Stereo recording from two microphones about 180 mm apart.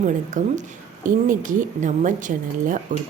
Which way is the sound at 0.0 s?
45° right (ahead or behind).